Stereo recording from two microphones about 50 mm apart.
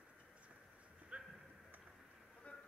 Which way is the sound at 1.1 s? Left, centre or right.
Right.